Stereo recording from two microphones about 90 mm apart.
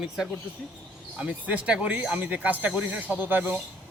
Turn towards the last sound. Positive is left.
turn(degrees=-20)  # may be behind; listen again after turning